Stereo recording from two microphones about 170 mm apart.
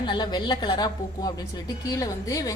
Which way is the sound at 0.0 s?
25° left (ahead or behind).